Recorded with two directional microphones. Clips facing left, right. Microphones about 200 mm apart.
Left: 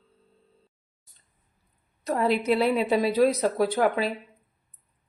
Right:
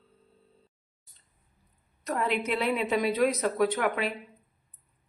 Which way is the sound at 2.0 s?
35° left (ahead or behind).